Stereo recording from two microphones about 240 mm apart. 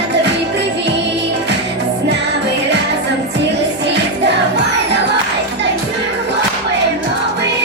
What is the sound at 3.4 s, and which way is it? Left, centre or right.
Music, right.